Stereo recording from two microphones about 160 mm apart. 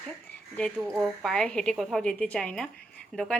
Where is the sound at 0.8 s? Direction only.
Centre (ahead or behind).